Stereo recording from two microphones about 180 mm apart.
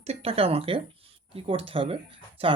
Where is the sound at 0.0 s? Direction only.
35° right (ahead or behind).